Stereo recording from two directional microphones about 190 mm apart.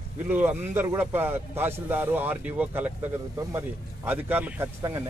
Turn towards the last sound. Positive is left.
turn(degrees=-15)  # may be behind; listen again after turning